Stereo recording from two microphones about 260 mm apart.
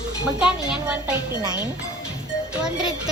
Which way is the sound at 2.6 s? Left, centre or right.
Centre.